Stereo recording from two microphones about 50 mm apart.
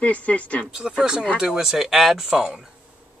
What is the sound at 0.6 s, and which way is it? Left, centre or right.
Speech, centre.